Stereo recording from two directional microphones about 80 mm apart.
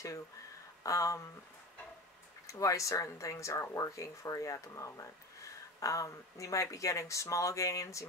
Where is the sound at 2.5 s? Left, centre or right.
Left.